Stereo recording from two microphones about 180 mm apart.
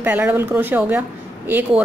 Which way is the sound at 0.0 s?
10° right (ahead or behind).